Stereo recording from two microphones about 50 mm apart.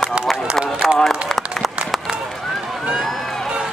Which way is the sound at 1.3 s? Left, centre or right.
Centre.